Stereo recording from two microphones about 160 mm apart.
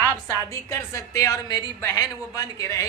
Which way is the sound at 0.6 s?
20° left (ahead or behind).